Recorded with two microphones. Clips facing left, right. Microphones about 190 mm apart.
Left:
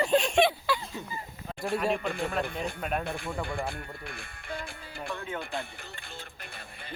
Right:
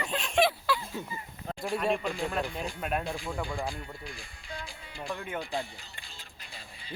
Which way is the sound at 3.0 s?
60° left (ahead or behind).